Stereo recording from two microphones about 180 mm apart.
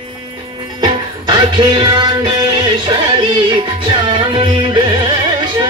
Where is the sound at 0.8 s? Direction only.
25° right (ahead or behind).